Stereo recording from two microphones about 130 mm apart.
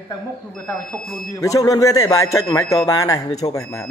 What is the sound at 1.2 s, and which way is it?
A man's voice, 25° left (ahead or behind).